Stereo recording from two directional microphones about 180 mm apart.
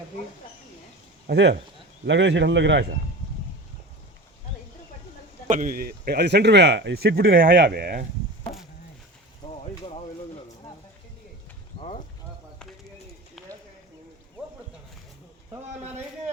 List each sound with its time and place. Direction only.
1.3 s speech: 70° right (ahead or behind)
2.0 s a man's voice: 85° right
5.5 s speech: 50° right (ahead or behind)
7.4 s speech: 90° right; by 8.0 s 60° right (ahead or behind)
11.8 s a sound: 35° left (ahead or behind)